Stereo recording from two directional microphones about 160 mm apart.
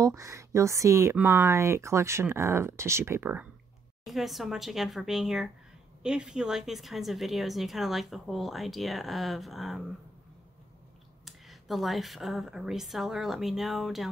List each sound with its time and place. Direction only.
0.0 s speech: 20° right (ahead or behind)
4.0 s speech: centre (ahead or behind)
11.2 s speech: centre (ahead or behind)